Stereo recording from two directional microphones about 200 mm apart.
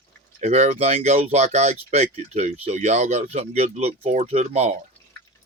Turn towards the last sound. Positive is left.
turn(degrees=-35)  # may be behind; listen again after turning